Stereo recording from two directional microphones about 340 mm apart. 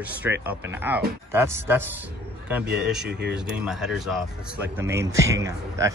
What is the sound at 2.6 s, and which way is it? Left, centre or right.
Speech, right.